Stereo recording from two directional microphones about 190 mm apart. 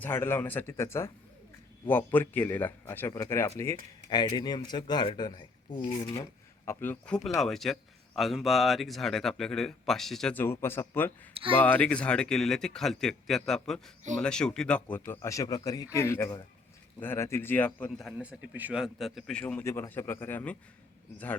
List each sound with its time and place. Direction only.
0.0 s a man's voice: 10° left (ahead or behind)
6.7 s a man's voice: 10° left (ahead or behind)